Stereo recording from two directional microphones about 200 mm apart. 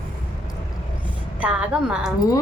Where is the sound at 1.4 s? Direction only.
5° right (ahead or behind).